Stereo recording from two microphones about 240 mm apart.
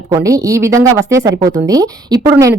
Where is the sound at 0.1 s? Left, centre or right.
Centre.